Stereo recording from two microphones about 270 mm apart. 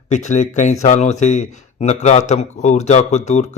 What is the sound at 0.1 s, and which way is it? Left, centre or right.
Speech, left.